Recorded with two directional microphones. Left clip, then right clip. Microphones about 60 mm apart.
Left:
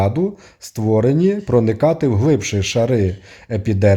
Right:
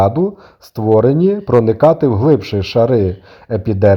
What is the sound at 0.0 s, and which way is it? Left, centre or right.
A man's voice, right.